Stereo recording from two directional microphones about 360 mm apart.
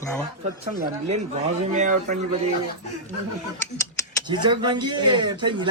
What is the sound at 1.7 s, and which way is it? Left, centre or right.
Speech, right.